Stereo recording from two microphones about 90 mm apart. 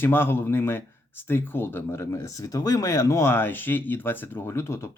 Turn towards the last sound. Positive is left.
turn(degrees=30)  # may be behind; listen again after turning